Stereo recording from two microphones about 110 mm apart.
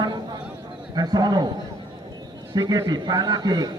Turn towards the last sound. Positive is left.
turn(degrees=-40)  # may be behind; listen again after turning